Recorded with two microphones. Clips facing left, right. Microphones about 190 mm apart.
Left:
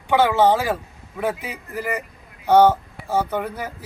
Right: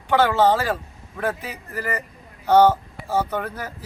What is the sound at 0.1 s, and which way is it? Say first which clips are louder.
Speech: left 1 dB; 10° left (ahead or behind).